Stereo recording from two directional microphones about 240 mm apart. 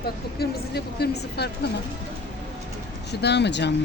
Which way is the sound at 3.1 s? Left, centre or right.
Left.